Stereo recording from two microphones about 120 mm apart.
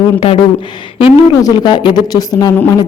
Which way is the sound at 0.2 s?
55° left (ahead or behind).